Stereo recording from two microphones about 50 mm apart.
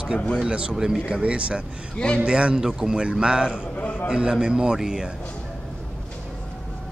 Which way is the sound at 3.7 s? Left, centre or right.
Left.